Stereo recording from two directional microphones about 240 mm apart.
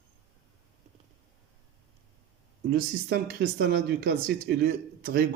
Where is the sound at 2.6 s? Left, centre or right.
Right.